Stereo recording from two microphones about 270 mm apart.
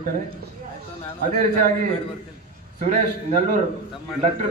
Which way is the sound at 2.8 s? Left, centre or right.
Right.